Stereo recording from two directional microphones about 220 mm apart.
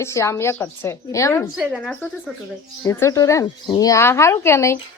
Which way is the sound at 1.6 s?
Centre (ahead or behind).